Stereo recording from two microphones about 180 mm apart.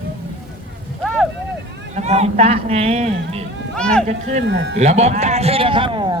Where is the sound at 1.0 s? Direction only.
Centre (ahead or behind).